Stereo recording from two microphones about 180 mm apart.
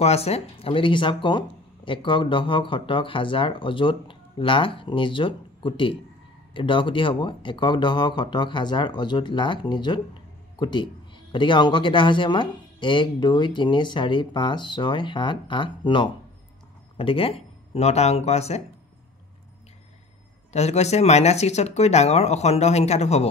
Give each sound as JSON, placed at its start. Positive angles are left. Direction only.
{"t": 0.0, "sound": "speech", "side_deg": 35}
{"t": 20.5, "sound": "speech", "side_deg": 35}